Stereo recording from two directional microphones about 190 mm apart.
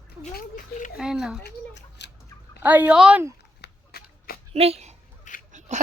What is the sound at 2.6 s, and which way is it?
Speech, 10° right (ahead or behind).